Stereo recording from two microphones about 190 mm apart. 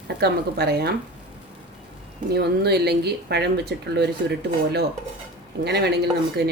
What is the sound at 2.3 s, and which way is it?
Speech, 60° right (ahead or behind).